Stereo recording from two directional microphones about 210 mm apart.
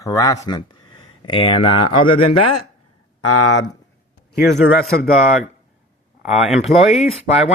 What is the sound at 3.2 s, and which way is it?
Speech, 90° left.